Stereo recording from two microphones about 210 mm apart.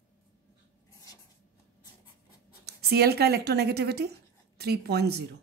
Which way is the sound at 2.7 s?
50° right (ahead or behind).